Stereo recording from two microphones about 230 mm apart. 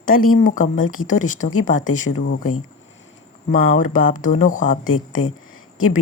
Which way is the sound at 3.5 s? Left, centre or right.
Left.